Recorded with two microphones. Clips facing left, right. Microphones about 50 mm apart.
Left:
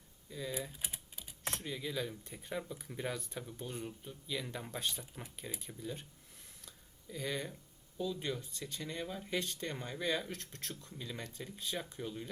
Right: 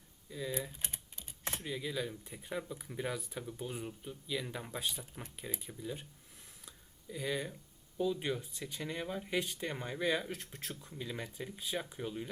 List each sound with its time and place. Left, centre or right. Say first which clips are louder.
0.3 s speech: right 2 dB; centre
0.9 s typing: even; centre
1.5 s speech: right 1 dB; centre
6.7 s a sound: right 2 dB; centre
7.9 s speech: right 4 dB; centre